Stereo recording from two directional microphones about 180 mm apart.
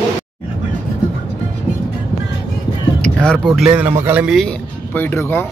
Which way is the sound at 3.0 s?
5° left (ahead or behind).